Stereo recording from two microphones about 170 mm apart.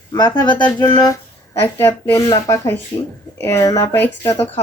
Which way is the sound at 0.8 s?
15° left (ahead or behind).